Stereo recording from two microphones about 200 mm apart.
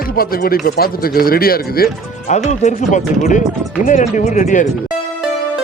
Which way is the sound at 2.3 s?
35° left (ahead or behind).